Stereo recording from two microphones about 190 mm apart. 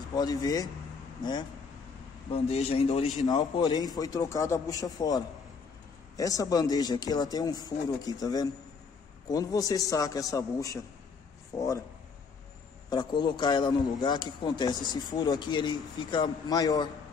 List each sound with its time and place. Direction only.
0.1 s a man's voice: 20° left (ahead or behind)
12.9 s a man's voice: 20° left (ahead or behind)